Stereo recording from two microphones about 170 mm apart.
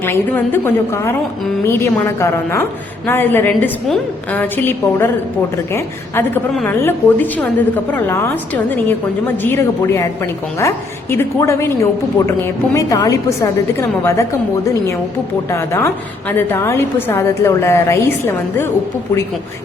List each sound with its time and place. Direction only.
0.0 s a woman's voice: 10° left (ahead or behind)
15.4 s a woman's voice: 15° left (ahead or behind)